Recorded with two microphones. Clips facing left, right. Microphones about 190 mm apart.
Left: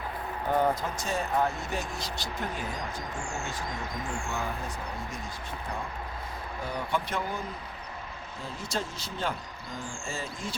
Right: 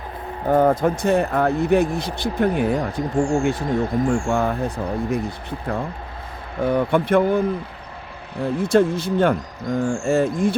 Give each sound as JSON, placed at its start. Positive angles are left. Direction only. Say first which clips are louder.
{"t": 0.4, "sound": "speech", "louder": "right 10 dB", "side_deg": -50}